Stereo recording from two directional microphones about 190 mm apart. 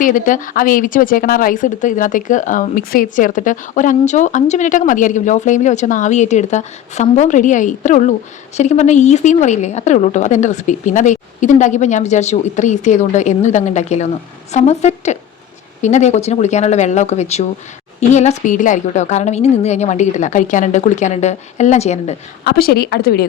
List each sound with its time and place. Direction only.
0.0 s speech: 45° left (ahead or behind)
22.4 s a woman's voice: 55° left (ahead or behind)